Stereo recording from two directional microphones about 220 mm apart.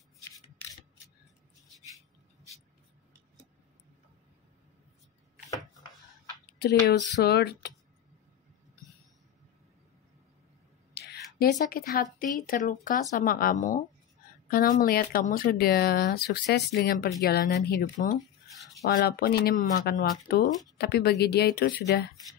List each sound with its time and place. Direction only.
6.6 s speech: 50° left (ahead or behind)
11.0 s a sound: 45° left (ahead or behind)
11.3 s speech: 40° left (ahead or behind)